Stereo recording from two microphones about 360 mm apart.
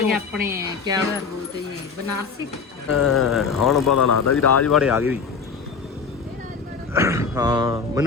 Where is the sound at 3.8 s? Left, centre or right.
Left.